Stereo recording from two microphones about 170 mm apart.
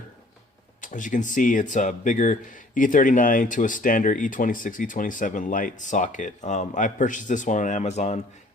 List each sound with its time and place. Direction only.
0.8 s speech: 50° left (ahead or behind)